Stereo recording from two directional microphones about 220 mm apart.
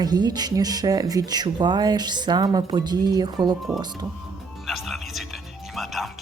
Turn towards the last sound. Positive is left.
turn(degrees=0)  # may be behind; listen again after turning